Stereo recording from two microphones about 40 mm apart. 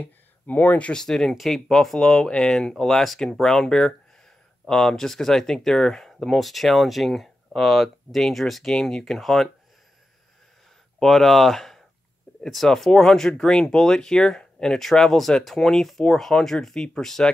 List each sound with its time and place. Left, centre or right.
0.0 s a sound: left
0.9 s speech: centre
1.3 s speech: centre
2.0 s speech: centre
11.0 s speech: centre
12.3 s a sound: left
12.6 s speech: centre